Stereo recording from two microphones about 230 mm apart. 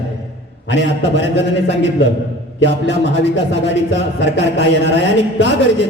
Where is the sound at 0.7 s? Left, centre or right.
Left.